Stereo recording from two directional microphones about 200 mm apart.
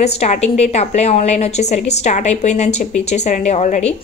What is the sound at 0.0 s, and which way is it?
A woman's voice, 35° left (ahead or behind).